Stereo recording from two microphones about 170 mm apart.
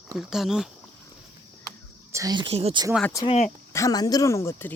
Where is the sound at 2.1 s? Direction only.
20° right (ahead or behind).